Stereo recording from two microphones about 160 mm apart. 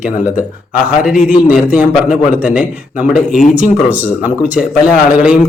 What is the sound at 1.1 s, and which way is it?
Speech, 55° left (ahead or behind).